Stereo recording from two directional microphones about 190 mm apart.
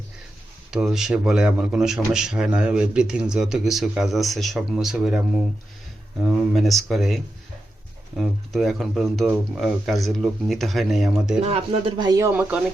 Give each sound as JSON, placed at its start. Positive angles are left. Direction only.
{"t": 0.7, "sound": "a man's voice", "side_deg": -5}
{"t": 11.3, "sound": "speech", "side_deg": -35}